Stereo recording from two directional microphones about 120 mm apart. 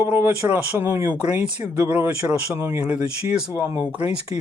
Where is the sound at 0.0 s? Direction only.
15° right (ahead or behind).